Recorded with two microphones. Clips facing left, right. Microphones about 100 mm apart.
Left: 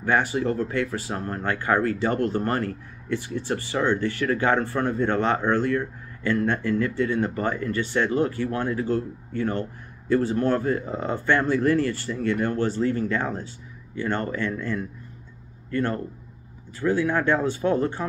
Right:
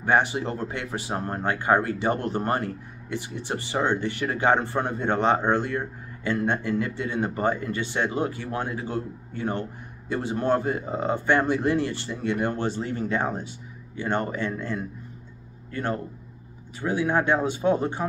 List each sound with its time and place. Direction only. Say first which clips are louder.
0.0 s speech: even; 20° right (ahead or behind)